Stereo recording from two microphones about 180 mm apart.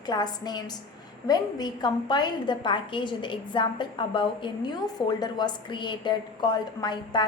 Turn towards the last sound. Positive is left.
turn(degrees=25)  # may be behind; listen again after turning